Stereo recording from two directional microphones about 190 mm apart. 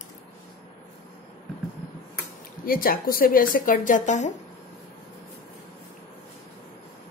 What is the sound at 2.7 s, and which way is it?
Speech, 50° left (ahead or behind).